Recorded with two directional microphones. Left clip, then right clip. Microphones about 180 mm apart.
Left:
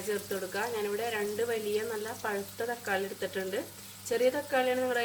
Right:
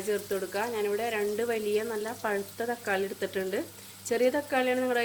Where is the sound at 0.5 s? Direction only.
50° right (ahead or behind).